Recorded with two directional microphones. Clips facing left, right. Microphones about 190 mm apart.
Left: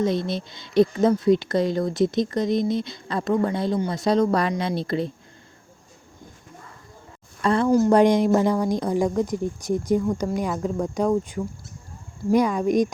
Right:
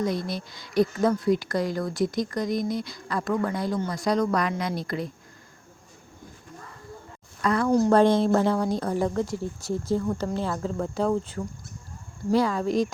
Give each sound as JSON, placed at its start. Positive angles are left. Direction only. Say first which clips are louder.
{"t": 0.0, "sound": "speech", "louder": "left 4 dB", "side_deg": 25}
{"t": 7.4, "sound": "speech", "louder": "left 3 dB", "side_deg": 30}
{"t": 7.9, "sound": "speech", "louder": "left 1 dB", "side_deg": 15}